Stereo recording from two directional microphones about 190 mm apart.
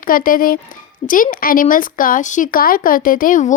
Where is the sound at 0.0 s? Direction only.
45° left (ahead or behind).